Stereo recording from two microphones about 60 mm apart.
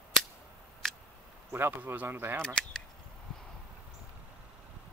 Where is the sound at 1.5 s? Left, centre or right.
Right.